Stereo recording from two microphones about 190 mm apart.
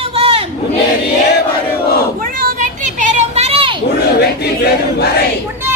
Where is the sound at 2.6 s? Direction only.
40° right (ahead or behind).